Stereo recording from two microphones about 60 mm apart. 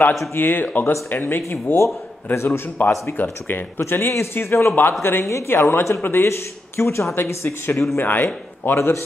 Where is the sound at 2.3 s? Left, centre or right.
Left.